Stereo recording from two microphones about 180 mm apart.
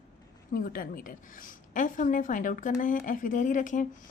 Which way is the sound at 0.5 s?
55° left (ahead or behind).